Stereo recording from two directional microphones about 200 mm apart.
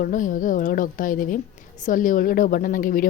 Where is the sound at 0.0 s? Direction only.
40° left (ahead or behind).